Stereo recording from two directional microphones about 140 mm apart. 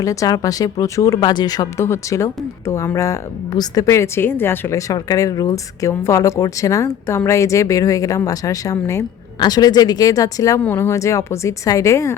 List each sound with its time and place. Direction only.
0.0 s speech: 25° left (ahead or behind)